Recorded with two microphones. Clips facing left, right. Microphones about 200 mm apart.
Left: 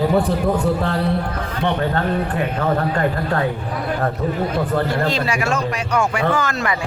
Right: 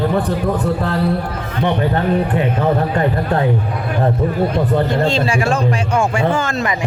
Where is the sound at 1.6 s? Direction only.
15° right (ahead or behind).